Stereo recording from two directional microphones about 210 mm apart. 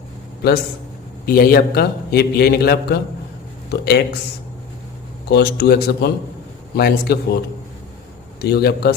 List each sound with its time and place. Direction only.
1.2 s a man's voice: 45° left (ahead or behind)
5.3 s a man's voice: 50° left (ahead or behind)
8.4 s a man's voice: 50° left (ahead or behind)